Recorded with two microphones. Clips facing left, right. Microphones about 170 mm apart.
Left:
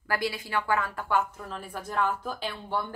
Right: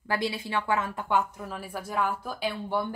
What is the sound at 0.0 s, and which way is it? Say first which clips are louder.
A woman's voice: right 1 dB; 20° right (ahead or behind).